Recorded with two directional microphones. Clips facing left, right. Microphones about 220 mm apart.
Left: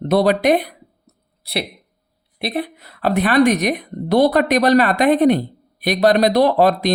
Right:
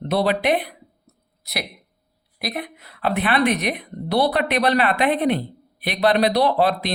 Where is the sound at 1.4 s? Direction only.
30° left (ahead or behind).